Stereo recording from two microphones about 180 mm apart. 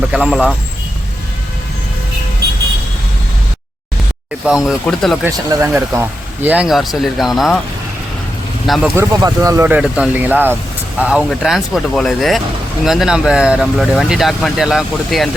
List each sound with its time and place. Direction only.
0.1 s speech: 5° right (ahead or behind)
4.4 s speech: 5° right (ahead or behind)
5.2 s speech: 10° right (ahead or behind)
8.6 s speech: centre (ahead or behind)
9.0 s speech: 20° right (ahead or behind)
9.6 s speech: 5° right (ahead or behind)